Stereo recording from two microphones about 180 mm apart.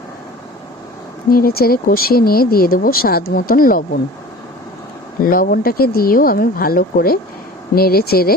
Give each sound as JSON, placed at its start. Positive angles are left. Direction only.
{"t": 1.3, "sound": "speech", "side_deg": 55}
{"t": 5.2, "sound": "speech", "side_deg": 50}